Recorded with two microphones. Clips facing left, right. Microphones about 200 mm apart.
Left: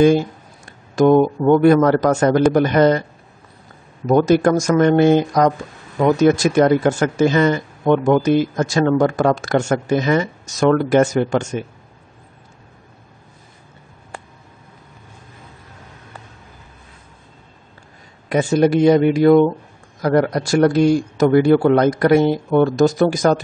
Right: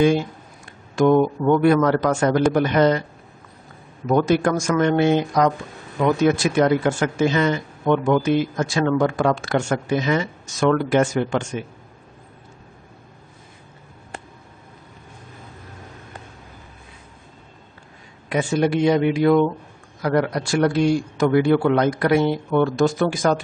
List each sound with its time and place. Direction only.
0.9 s a man's voice: 35° left (ahead or behind)
4.1 s a man's voice: 40° left (ahead or behind)
18.3 s a man's voice: 40° left (ahead or behind)